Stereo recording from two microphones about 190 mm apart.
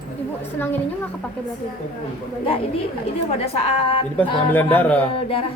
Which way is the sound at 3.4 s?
30° left (ahead or behind).